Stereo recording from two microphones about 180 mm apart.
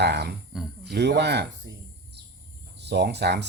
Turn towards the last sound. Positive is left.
turn(degrees=-70)  # may be behind; listen again after turning